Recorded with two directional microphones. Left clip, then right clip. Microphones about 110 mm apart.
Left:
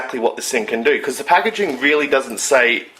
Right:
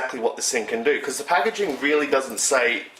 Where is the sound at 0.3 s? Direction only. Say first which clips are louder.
Left 4 dB; 20° left (ahead or behind).